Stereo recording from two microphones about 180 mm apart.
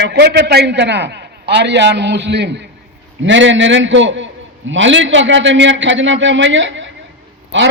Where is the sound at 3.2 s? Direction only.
90° right.